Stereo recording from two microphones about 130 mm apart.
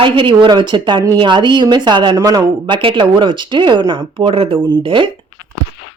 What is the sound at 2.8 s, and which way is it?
Speech, 40° right (ahead or behind).